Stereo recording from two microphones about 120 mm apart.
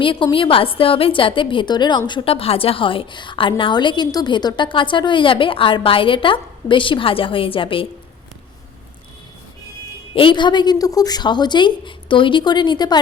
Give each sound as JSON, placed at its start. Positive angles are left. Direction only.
{"t": 0.0, "sound": "a woman's voice", "side_deg": 45}
{"t": 10.2, "sound": "a woman's voice", "side_deg": 40}